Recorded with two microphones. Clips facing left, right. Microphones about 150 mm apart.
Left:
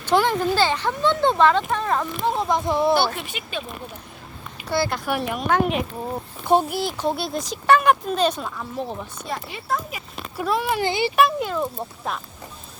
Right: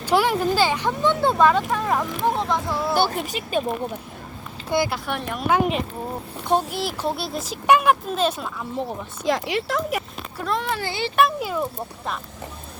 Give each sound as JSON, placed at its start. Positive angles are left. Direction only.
{"t": 0.0, "sound": "speech", "side_deg": -10}
{"t": 2.5, "sound": "speech", "side_deg": 20}
{"t": 2.9, "sound": "speech", "side_deg": -45}
{"t": 4.9, "sound": "speech", "side_deg": 5}
{"t": 8.7, "sound": "speech", "side_deg": -15}
{"t": 9.2, "sound": "speech", "side_deg": -85}
{"t": 10.3, "sound": "speech", "side_deg": 5}
{"t": 11.2, "sound": "speech", "side_deg": 0}